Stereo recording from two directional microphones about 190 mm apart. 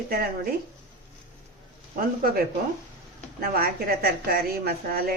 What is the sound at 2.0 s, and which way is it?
Speech, 50° right (ahead or behind).